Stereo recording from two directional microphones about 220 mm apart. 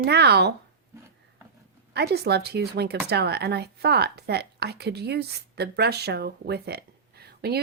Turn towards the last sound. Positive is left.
turn(degrees=-45)  # may be behind; listen again after turning